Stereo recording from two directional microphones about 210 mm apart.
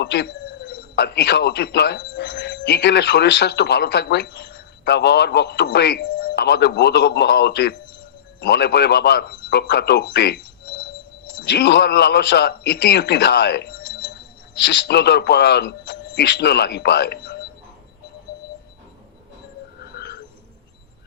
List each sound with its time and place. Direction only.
0.0 s a man's voice: 55° left (ahead or behind)